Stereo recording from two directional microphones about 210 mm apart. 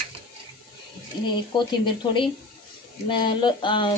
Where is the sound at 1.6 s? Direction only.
20° left (ahead or behind).